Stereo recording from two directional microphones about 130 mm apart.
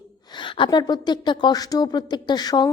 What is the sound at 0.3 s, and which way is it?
A woman's voice, 35° left (ahead or behind).